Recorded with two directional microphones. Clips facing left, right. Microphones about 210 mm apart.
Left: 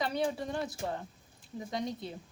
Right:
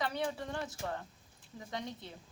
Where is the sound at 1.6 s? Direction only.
35° left (ahead or behind).